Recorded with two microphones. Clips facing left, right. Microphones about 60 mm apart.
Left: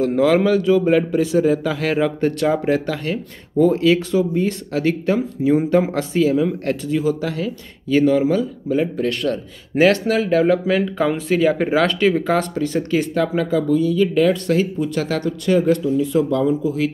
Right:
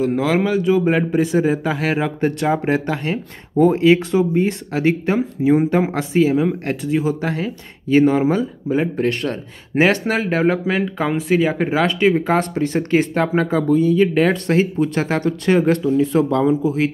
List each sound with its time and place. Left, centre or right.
0.0 s a man's voice: centre; by 16.9 s right